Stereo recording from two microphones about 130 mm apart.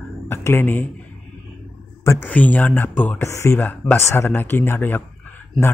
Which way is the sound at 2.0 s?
15° left (ahead or behind).